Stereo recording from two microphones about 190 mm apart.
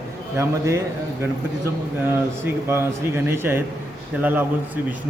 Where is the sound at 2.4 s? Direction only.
15° right (ahead or behind).